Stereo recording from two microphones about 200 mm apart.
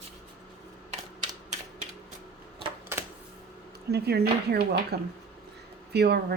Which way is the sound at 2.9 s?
10° right (ahead or behind).